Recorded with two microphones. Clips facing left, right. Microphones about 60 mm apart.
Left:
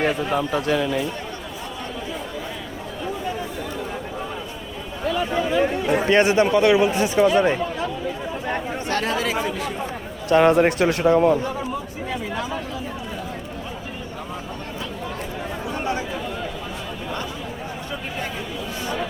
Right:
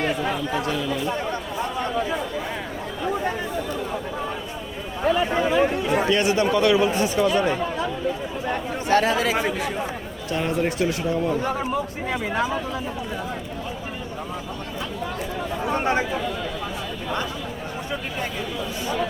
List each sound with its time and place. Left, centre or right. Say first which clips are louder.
0.3 s a man's voice: left 4 dB; left
5.0 s speech: right 2 dB; right
5.5 s speech: even; centre
6.1 s speech: left 6 dB; left
8.9 s speech: right 4 dB; centre
10.2 s a man's voice: left 9 dB; left
11.4 s speech: right 2 dB; right
15.7 s a sound: right 4 dB; right